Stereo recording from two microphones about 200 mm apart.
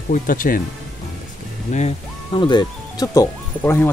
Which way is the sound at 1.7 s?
35° left (ahead or behind).